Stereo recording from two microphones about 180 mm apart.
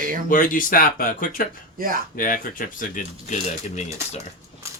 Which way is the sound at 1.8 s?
55° right (ahead or behind).